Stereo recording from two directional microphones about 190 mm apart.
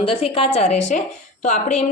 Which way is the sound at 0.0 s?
30° left (ahead or behind).